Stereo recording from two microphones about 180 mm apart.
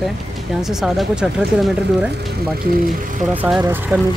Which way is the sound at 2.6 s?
55° right (ahead or behind).